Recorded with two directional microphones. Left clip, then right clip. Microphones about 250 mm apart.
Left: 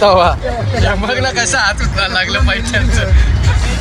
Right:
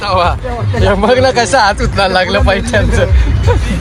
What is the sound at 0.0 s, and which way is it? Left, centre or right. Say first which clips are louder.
Speech: left 3 dB; centre.